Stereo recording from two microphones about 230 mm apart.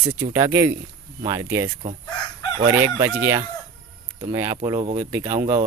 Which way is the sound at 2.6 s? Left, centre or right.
Centre.